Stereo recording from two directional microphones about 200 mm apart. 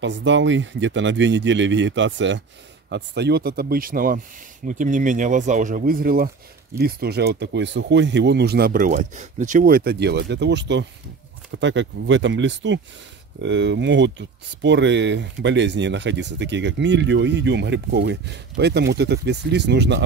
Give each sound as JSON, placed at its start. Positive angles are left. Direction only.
{"t": 0.0, "sound": "speech", "side_deg": -65}